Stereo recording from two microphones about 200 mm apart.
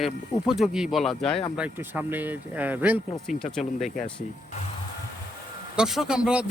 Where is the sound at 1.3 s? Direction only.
30° left (ahead or behind).